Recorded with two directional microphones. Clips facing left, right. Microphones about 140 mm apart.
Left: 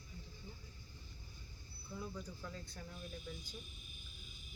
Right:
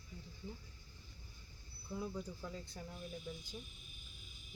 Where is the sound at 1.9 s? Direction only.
20° right (ahead or behind).